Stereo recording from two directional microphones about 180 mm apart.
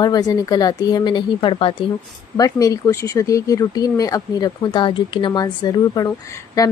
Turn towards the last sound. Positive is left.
turn(degrees=20)  # may be behind; listen again after turning